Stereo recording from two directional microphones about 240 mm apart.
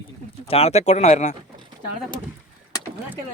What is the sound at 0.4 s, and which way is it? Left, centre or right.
Speech, left.